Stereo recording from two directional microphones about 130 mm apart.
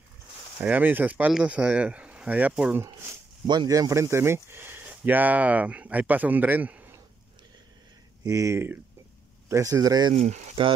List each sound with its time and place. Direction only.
0.6 s speech: 10° right (ahead or behind)
3.4 s speech: 30° right (ahead or behind); by 7.0 s 10° right (ahead or behind)
8.2 s speech: 25° right (ahead or behind)
10.1 s speech: 60° right (ahead or behind)